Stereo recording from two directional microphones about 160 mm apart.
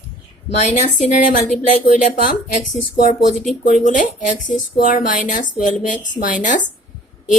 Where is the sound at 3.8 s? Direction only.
50° left (ahead or behind).